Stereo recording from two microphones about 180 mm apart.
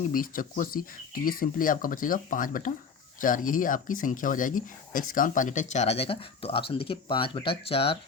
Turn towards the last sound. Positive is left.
turn(degrees=30)  # may be behind; listen again after turning